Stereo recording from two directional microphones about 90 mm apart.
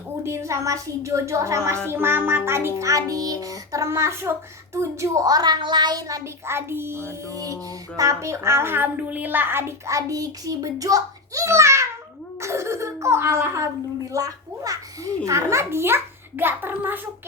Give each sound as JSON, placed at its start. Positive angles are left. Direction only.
{"t": 0.3, "sound": "a child's voice", "side_deg": -35}